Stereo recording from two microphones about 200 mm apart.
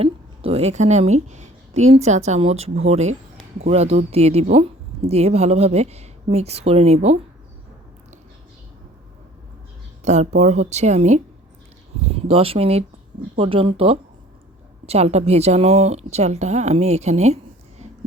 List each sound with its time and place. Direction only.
0.0 s a woman's voice: 30° right (ahead or behind)
10.0 s speech: 35° right (ahead or behind)